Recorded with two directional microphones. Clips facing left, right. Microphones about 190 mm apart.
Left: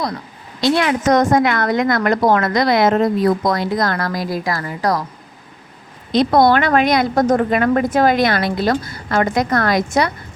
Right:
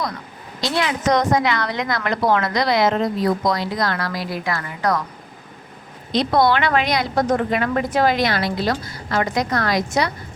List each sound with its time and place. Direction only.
0.6 s a woman's voice: 55° left (ahead or behind); by 5.0 s 35° left (ahead or behind)
6.1 s a woman's voice: 50° left (ahead or behind)